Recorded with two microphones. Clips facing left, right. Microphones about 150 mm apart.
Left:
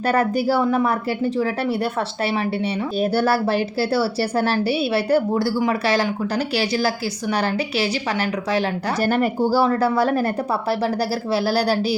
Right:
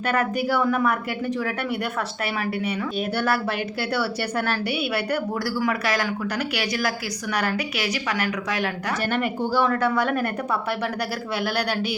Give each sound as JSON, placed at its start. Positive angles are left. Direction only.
{"t": 0.0, "sound": "a woman's voice", "side_deg": 35}